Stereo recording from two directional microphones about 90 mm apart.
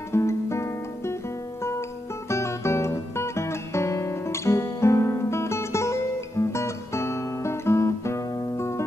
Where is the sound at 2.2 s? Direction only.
30° left (ahead or behind).